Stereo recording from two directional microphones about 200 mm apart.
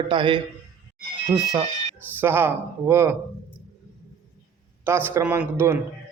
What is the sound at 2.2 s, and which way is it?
A man's voice, 10° right (ahead or behind).